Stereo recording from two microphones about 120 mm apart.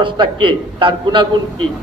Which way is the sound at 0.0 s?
45° right (ahead or behind).